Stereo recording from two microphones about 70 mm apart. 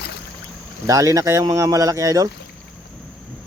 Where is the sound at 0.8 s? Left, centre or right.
Right.